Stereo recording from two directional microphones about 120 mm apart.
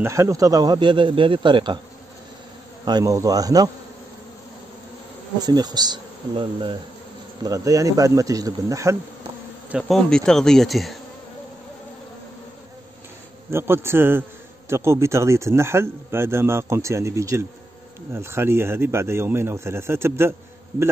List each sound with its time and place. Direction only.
0.0 s speech: 25° right (ahead or behind); by 1.8 s 40° right (ahead or behind)
2.8 s speech: 35° right (ahead or behind)
5.4 s speech: 35° right (ahead or behind)
7.4 s speech: 30° right (ahead or behind)
9.7 s speech: centre (ahead or behind)
13.5 s speech: 20° right (ahead or behind)